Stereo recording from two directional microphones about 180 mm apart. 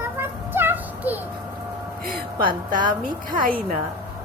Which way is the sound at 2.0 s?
55° right (ahead or behind).